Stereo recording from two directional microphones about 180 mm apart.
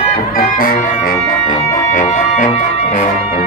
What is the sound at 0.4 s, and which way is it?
Music, 50° left (ahead or behind).